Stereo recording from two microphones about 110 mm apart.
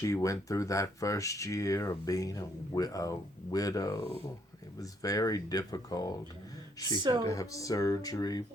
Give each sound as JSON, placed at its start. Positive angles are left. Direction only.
{"t": 0.0, "sound": "a woman's voice", "side_deg": 30}
{"t": 7.0, "sound": "speech", "side_deg": -40}
{"t": 7.3, "sound": "speech", "side_deg": 30}